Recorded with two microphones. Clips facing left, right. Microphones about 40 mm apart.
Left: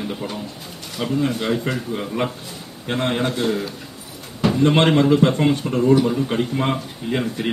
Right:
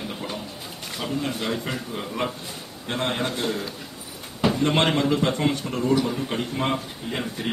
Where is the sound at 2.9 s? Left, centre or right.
Left.